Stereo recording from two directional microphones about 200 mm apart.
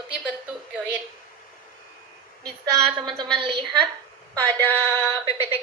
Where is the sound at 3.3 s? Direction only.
25° right (ahead or behind).